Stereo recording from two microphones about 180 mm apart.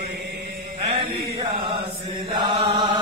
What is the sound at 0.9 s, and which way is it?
Mantra, 30° right (ahead or behind).